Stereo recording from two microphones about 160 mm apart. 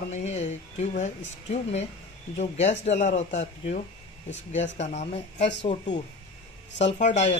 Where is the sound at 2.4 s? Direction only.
45° left (ahead or behind).